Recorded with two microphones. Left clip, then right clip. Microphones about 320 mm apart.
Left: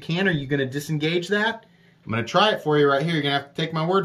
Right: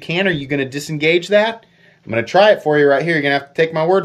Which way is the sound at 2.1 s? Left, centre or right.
Right.